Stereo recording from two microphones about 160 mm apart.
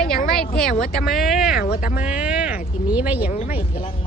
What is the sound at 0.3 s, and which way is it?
Speech, 5° left (ahead or behind).